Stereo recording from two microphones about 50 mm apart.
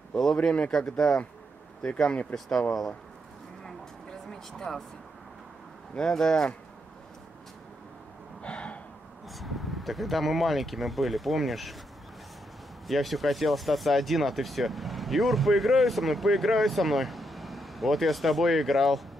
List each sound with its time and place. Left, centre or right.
0.1 s speech: centre
4.3 s speech: centre
5.9 s speech: centre
8.4 s a sound: left
9.3 s speech: centre
12.8 s speech: centre